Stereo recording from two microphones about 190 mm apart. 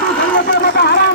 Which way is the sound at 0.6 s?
60° left (ahead or behind).